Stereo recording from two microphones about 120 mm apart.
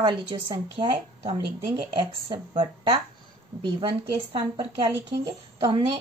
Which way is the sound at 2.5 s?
40° right (ahead or behind).